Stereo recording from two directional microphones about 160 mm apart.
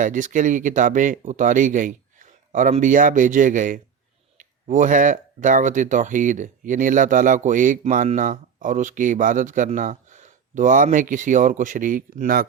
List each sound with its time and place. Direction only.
0.0 s speech: 55° right (ahead or behind)